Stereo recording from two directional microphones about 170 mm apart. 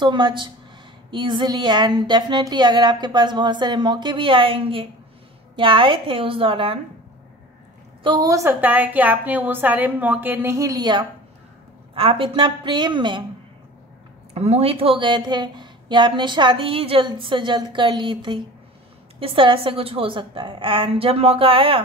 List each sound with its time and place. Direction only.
0.0 s a woman's voice: 25° right (ahead or behind)
8.0 s a woman's voice: 25° right (ahead or behind)
14.3 s a woman's voice: 40° right (ahead or behind)